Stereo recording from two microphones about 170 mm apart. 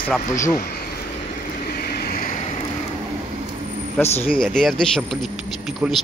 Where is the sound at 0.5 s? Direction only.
65° left (ahead or behind).